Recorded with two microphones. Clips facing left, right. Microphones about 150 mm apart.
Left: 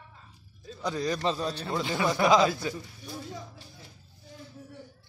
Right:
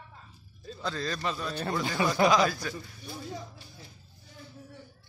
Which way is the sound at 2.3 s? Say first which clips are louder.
Left 2 dB; 20° left (ahead or behind).